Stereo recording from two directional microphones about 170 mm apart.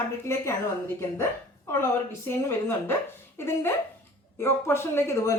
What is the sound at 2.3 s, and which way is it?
A woman's voice, 15° left (ahead or behind).